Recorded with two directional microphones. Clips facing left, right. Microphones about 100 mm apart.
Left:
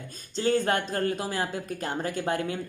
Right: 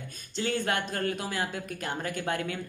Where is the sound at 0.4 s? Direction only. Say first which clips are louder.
Left 5 dB; 35° left (ahead or behind).